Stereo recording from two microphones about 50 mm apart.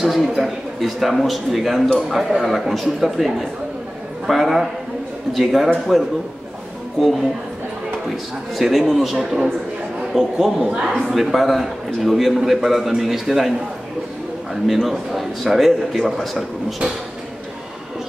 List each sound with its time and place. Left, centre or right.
0.0 s a man's voice: centre
8.5 s a man's voice: centre
10.6 s a man's voice: right
10.9 s a man's voice: centre
14.5 s a man's voice: centre